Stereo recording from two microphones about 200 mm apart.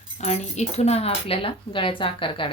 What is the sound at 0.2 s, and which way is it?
Speech, 35° left (ahead or behind).